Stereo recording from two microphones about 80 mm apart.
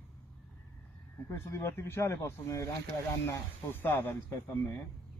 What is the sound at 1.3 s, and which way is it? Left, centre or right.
Speech, left.